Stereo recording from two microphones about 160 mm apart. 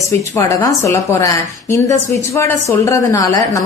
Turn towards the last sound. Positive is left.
turn(degrees=20)  # may be behind; listen again after turning